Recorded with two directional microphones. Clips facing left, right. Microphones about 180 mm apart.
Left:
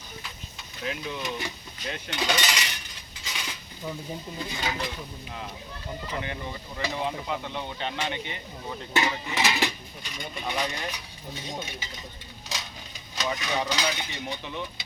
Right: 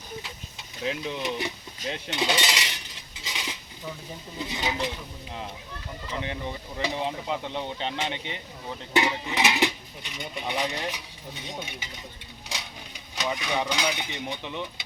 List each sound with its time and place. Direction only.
0.9 s speech: 25° right (ahead or behind)
1.9 s cutlery: 25° right (ahead or behind)
4.4 s speech: 20° right (ahead or behind)
6.2 s speech: 25° right (ahead or behind)
13.1 s speech: 15° right (ahead or behind)